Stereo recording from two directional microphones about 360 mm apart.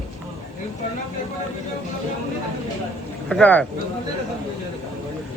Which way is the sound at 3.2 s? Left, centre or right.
Centre.